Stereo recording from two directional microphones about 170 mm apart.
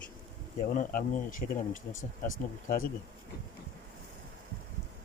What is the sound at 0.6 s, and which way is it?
Speech, 50° left (ahead or behind).